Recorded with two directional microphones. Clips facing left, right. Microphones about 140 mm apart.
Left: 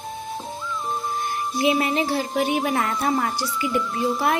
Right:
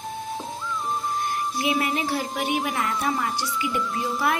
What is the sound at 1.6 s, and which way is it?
A woman's voice, 25° left (ahead or behind).